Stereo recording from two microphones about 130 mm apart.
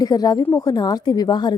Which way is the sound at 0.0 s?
30° left (ahead or behind).